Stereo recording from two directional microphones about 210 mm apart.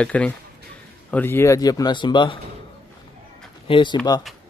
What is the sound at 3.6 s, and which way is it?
Speech, 25° left (ahead or behind).